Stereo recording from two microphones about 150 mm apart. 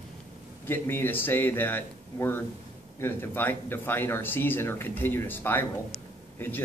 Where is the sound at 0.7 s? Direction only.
15° left (ahead or behind).